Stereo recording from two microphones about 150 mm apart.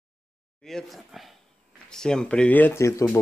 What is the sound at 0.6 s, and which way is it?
Speech, centre (ahead or behind).